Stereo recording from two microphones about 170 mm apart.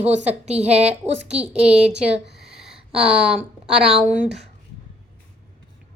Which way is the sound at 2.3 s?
75° right (ahead or behind).